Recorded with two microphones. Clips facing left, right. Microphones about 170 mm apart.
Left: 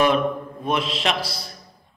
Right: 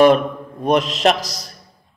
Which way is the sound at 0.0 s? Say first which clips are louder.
Right 6 dB; 40° right (ahead or behind).